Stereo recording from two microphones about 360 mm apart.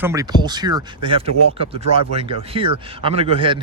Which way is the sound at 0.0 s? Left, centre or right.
Centre.